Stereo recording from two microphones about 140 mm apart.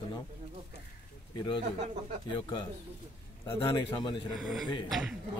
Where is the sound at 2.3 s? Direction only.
35° left (ahead or behind).